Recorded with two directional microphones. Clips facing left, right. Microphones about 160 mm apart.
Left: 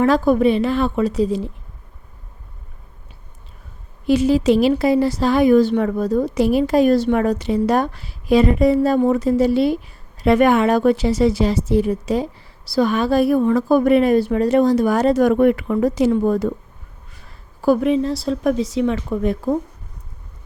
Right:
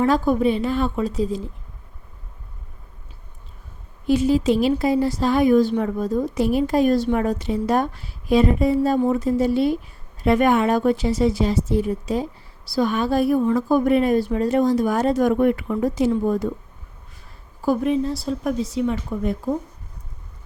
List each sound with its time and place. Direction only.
0.0 s a woman's voice: 75° left (ahead or behind)
4.0 s a woman's voice: 80° left